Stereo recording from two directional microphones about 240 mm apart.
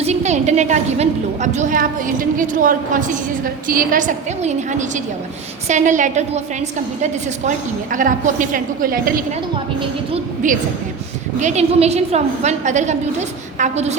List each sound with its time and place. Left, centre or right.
0.0 s a woman's voice: right